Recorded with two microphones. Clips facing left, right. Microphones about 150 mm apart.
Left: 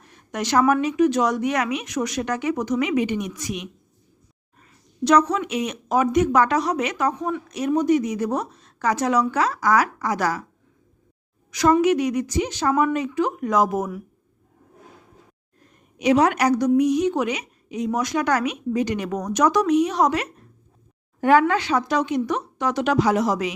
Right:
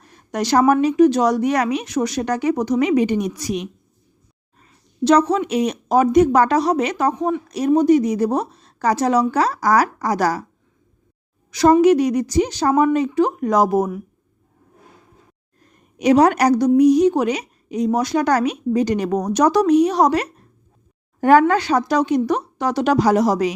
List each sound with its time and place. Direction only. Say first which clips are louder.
0.1 s a woman's voice: right 4 dB; 35° right (ahead or behind)
5.0 s a woman's voice: right 3 dB; 30° right (ahead or behind)
11.5 s a woman's voice: right 5 dB; 35° right (ahead or behind)
16.0 s a woman's voice: right 4 dB; 40° right (ahead or behind)